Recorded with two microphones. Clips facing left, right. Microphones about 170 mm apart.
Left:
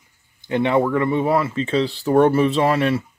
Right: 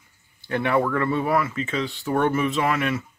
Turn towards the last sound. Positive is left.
turn(degrees=30)  # may be behind; listen again after turning